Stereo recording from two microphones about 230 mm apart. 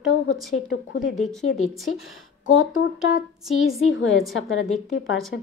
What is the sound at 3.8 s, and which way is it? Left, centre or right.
Speech, left.